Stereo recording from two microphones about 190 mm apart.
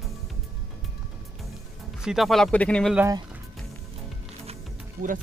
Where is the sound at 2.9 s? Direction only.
15° right (ahead or behind).